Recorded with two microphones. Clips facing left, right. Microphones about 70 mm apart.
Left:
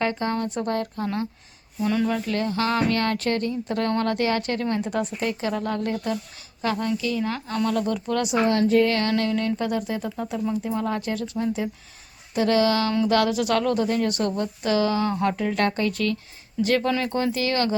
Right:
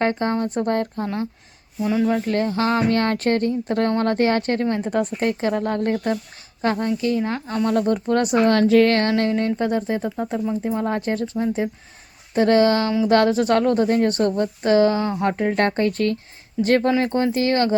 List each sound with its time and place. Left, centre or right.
0.0 s speech: right
1.8 s speech: centre
2.2 s speech: right
8.5 s speech: right
8.9 s speech: right
12.3 s speech: right